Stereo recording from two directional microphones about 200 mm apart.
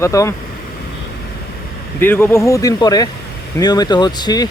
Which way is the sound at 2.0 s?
10° left (ahead or behind).